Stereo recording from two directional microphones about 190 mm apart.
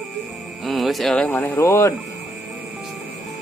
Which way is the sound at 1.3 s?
15° left (ahead or behind).